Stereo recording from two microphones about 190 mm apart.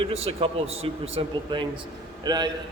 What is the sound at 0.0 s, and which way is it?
A man's voice, 30° right (ahead or behind).